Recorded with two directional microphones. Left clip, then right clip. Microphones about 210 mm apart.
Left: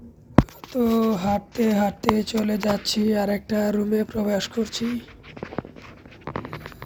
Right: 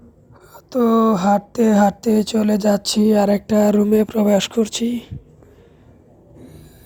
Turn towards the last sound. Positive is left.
turn(degrees=-40)  # may be behind; listen again after turning